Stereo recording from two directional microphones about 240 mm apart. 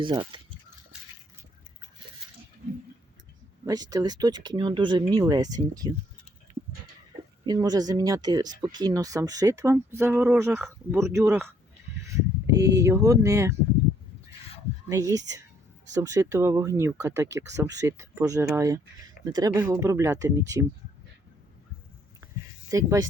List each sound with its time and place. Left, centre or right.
0.0 s speech: centre
3.7 s speech: centre
7.4 s speech: centre
12.0 s a sound: centre
12.8 s speech: centre
14.8 s speech: centre
22.7 s speech: centre